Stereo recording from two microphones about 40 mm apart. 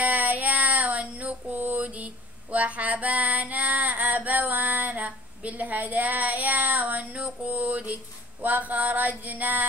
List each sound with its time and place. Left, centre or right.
0.0 s child singing: right
8.4 s mantra: right